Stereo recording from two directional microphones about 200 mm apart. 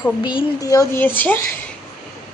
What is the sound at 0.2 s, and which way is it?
Speech, 20° left (ahead or behind).